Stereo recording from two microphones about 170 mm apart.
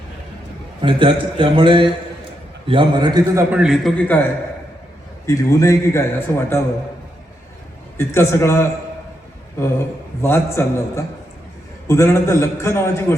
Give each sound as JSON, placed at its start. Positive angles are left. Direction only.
{"t": 0.8, "sound": "a man's voice", "side_deg": -30}
{"t": 3.5, "sound": "a man's voice", "side_deg": -5}
{"t": 7.9, "sound": "a man's voice", "side_deg": 15}
{"t": 10.2, "sound": "a man's voice", "side_deg": 15}